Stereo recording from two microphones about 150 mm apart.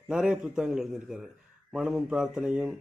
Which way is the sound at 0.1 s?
5° right (ahead or behind).